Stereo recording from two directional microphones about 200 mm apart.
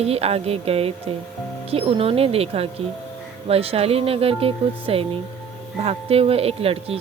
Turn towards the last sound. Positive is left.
turn(degrees=-30)  # may be behind; listen again after turning